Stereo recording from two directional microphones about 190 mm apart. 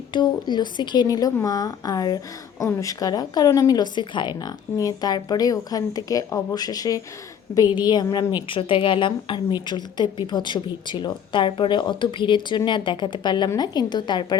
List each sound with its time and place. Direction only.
0.1 s speech: 25° left (ahead or behind)